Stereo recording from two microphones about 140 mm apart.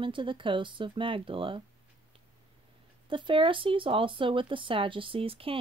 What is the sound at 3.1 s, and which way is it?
Speech, 35° right (ahead or behind).